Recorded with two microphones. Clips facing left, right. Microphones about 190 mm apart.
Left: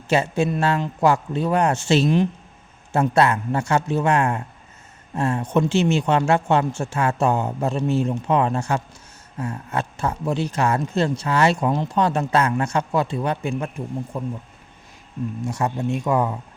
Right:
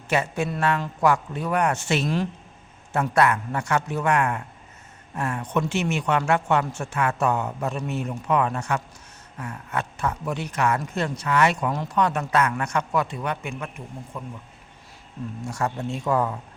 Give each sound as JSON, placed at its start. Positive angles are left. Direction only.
{"t": 0.1, "sound": "speech", "side_deg": 25}
{"t": 15.4, "sound": "speech", "side_deg": 20}